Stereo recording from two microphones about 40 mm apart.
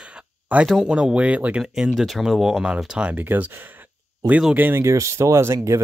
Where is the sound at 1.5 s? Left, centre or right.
Right.